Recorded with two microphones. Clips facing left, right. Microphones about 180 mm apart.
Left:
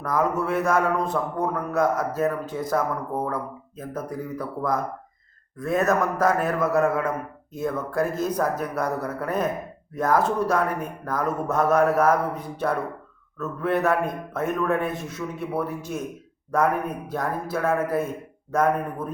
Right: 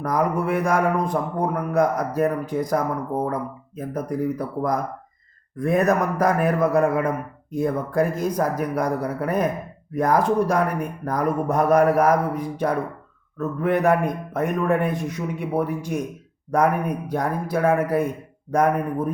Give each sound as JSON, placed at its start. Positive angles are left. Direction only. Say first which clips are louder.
{"t": 0.0, "sound": "a man's voice", "louder": "right 2 dB", "side_deg": -15}